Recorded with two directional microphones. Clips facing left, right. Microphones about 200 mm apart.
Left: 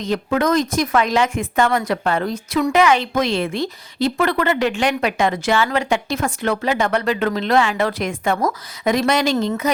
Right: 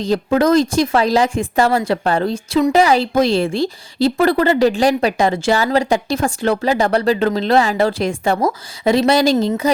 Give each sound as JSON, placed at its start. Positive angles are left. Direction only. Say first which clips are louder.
{"t": 0.0, "sound": "a woman's voice", "louder": "right 4 dB", "side_deg": -35}